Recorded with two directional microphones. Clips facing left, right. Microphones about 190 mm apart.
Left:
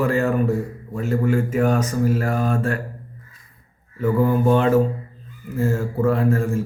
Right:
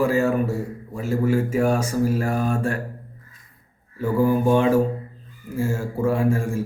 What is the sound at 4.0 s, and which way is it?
A man's voice, 10° right (ahead or behind).